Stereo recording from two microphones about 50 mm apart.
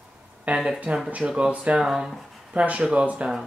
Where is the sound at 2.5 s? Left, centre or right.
Right.